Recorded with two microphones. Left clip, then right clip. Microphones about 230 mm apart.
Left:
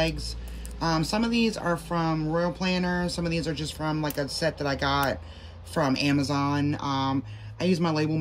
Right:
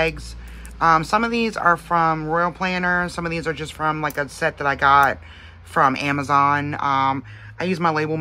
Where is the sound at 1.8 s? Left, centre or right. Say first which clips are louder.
Right 9 dB; centre.